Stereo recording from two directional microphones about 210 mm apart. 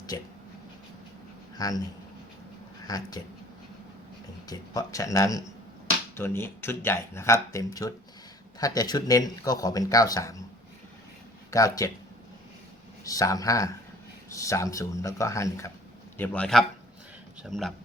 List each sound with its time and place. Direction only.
1.5 s speech: 15° left (ahead or behind)
2.8 s speech: 15° left (ahead or behind)
4.4 s speech: 15° left (ahead or behind)
11.5 s speech: 15° left (ahead or behind)
13.1 s a man's voice: 15° left (ahead or behind)